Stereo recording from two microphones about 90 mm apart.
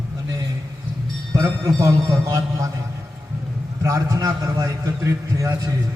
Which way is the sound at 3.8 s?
40° right (ahead or behind).